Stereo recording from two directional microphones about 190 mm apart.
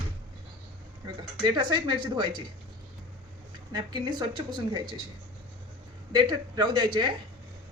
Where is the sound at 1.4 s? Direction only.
25° right (ahead or behind).